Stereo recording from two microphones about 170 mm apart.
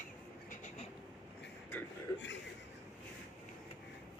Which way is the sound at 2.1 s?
90° left.